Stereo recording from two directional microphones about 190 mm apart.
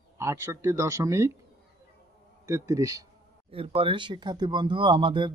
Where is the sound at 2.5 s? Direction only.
15° right (ahead or behind).